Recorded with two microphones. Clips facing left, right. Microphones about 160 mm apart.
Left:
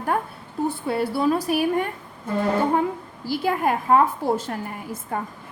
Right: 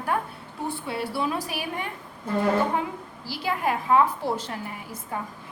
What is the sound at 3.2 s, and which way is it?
A woman's voice, 50° left (ahead or behind).